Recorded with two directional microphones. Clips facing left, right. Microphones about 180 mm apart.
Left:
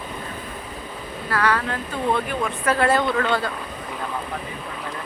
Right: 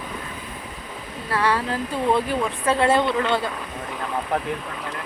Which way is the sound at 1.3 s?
25° right (ahead or behind).